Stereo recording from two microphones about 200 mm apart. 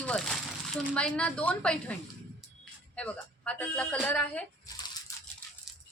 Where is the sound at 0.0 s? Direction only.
5° left (ahead or behind).